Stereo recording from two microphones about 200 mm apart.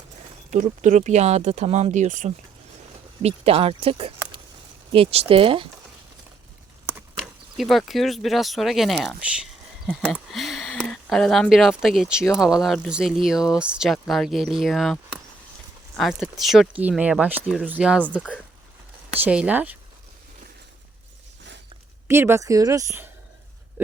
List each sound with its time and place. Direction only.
0.5 s speech: 40° right (ahead or behind)
7.2 s speech: centre (ahead or behind)
9.0 s a sound: 5° right (ahead or behind)
10.0 s speech: 5° right (ahead or behind)
19.2 s speech: 5° right (ahead or behind)
22.0 s speech: 10° right (ahead or behind)
23.8 s a sound: 10° right (ahead or behind)